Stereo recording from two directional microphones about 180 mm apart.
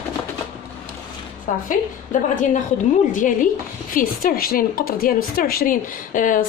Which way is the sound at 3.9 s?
55° left (ahead or behind).